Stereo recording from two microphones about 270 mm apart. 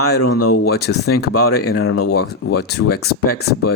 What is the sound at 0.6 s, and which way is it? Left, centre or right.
Speech, left.